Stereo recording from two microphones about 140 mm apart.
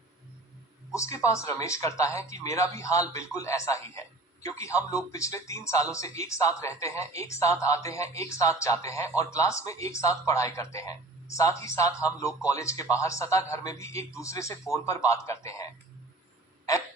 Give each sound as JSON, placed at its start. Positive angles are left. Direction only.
{"t": 0.9, "sound": "speech", "side_deg": 20}